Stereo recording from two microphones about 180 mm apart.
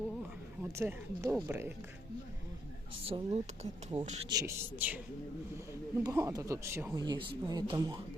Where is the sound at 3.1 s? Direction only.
30° right (ahead or behind).